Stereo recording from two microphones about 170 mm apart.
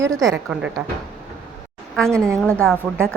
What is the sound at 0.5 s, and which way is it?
Speech, 5° right (ahead or behind).